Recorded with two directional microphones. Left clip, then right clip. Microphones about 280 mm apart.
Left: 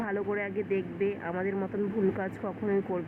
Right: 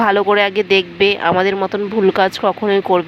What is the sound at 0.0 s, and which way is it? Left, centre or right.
Speech, right.